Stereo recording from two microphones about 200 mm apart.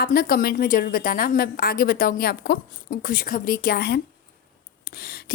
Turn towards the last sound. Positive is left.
turn(degrees=50)  # may be behind; listen again after turning